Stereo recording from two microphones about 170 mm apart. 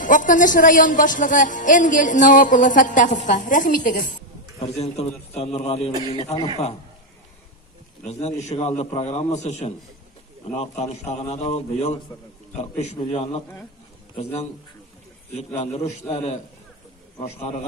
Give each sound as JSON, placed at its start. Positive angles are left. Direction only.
{"t": 0.0, "sound": "speech", "side_deg": 50}
{"t": 4.6, "sound": "a man's voice", "side_deg": 40}
{"t": 8.0, "sound": "a man's voice", "side_deg": 40}
{"t": 12.1, "sound": "a man's voice", "side_deg": 25}
{"t": 12.5, "sound": "a man's voice", "side_deg": 40}